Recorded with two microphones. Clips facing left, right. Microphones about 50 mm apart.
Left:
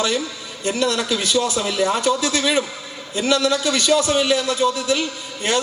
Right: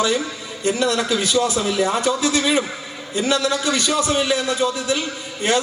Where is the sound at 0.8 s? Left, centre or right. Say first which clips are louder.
Even; right.